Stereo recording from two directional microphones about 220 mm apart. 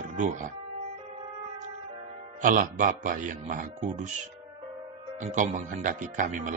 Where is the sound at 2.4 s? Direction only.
35° right (ahead or behind).